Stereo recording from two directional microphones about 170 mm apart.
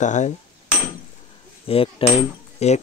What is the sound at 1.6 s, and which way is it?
Cutlery, 35° left (ahead or behind).